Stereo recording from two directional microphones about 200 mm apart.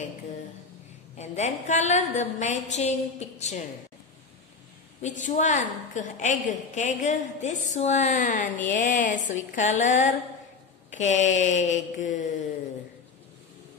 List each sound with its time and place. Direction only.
1.1 s a woman's voice: 35° left (ahead or behind)
5.0 s a woman's voice: 35° left (ahead or behind)